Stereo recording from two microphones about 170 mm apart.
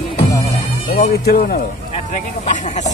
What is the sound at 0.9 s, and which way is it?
Speech, 60° left (ahead or behind).